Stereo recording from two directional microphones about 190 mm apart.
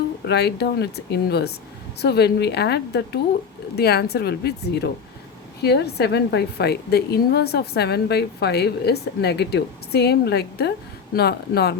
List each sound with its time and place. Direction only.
0.3 s a woman's voice: 60° left (ahead or behind)